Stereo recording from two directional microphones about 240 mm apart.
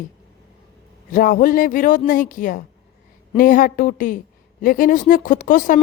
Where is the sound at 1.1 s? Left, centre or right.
Left.